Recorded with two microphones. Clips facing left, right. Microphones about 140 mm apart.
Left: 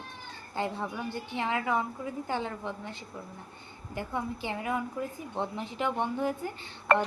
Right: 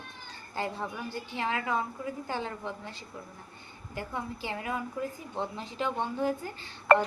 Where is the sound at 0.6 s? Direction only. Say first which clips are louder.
Left 2 dB; 15° left (ahead or behind).